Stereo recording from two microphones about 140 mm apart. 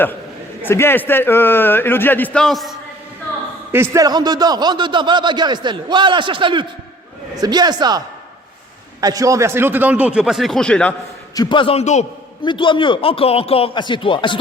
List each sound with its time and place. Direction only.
0.6 s a man's voice: 15° left (ahead or behind); by 2.7 s centre (ahead or behind)
3.9 s speech: 30° right (ahead or behind); by 10.9 s 5° left (ahead or behind)
11.3 s a man's voice: 35° left (ahead or behind); by 12.0 s 50° left (ahead or behind)
12.5 s speech: 35° left (ahead or behind)